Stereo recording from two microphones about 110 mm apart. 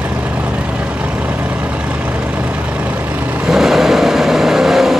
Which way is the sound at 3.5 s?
5° right (ahead or behind).